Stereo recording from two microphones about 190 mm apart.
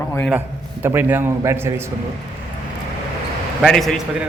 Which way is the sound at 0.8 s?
10° right (ahead or behind).